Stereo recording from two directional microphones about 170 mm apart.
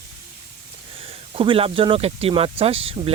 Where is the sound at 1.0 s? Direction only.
35° right (ahead or behind).